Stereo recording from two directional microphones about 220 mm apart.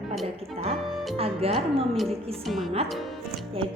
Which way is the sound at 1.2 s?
25° right (ahead or behind).